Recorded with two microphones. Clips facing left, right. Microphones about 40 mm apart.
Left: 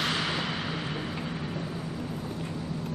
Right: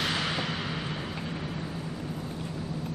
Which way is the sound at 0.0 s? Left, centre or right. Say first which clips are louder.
Even; centre.